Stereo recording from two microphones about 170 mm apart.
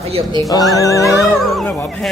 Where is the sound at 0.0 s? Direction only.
35° right (ahead or behind).